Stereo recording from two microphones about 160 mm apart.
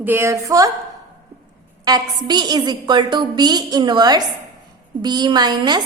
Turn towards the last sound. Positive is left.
turn(degrees=-25)  # may be behind; listen again after turning